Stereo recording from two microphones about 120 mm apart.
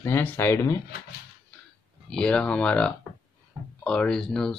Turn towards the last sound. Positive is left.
turn(degrees=5)  # may be behind; listen again after turning